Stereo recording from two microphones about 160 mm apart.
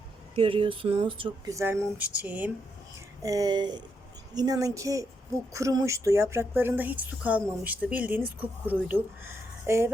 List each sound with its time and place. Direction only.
0.3 s a sound: 35° right (ahead or behind)
1.5 s speech: 15° right (ahead or behind)
3.2 s a woman's voice: 20° right (ahead or behind)